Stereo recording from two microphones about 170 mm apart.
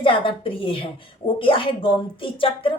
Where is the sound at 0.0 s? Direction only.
30° left (ahead or behind).